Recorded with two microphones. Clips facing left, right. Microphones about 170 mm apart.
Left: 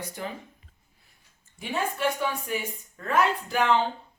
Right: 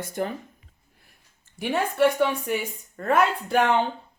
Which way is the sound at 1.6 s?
70° right (ahead or behind).